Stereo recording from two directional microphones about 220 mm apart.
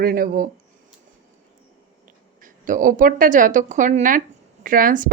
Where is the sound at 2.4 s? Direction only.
35° right (ahead or behind).